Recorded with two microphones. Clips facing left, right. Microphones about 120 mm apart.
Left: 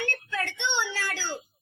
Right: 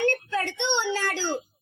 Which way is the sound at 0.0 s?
20° right (ahead or behind).